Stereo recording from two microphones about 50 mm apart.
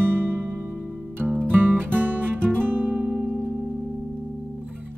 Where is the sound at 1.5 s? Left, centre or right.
Right.